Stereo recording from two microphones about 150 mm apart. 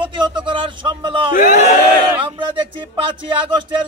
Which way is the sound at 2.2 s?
35° right (ahead or behind).